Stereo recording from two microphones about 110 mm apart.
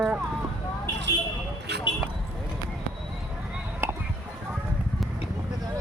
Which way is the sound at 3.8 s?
20° right (ahead or behind).